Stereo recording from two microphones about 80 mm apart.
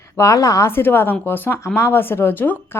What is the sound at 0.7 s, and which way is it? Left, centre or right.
A woman's voice, left.